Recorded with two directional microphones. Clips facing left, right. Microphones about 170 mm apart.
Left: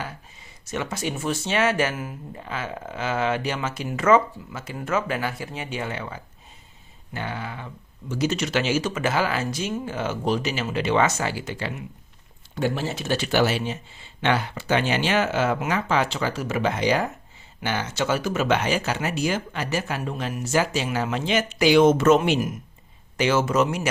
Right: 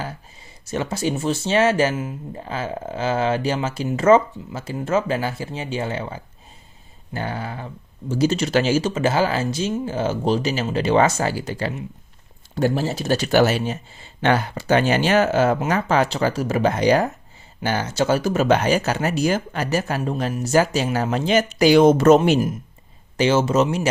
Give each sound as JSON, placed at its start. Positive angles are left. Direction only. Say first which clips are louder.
{"t": 0.7, "sound": "speech", "louder": "right 5 dB", "side_deg": -30}